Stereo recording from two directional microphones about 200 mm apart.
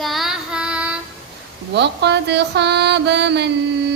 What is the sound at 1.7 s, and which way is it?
Mantra, 60° right (ahead or behind).